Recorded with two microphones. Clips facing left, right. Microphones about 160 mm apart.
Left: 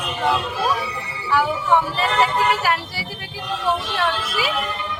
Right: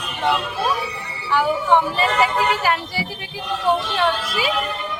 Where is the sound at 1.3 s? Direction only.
Centre (ahead or behind).